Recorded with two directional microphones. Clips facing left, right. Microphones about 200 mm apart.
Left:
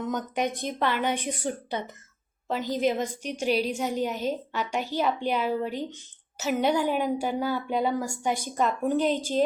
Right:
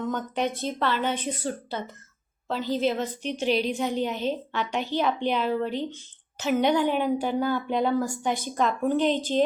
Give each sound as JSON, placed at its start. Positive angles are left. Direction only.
{"t": 0.1, "sound": "a woman's voice", "side_deg": 10}